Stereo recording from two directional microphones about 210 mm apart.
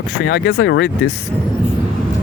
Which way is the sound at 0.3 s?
55° left (ahead or behind).